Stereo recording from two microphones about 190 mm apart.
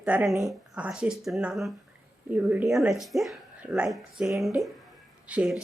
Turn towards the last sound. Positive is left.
turn(degrees=-5)  # may be behind; listen again after turning